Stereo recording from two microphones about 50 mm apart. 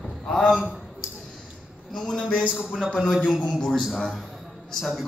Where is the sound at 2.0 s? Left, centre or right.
Centre.